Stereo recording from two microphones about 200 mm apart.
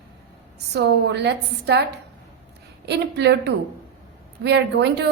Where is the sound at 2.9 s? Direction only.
60° right (ahead or behind).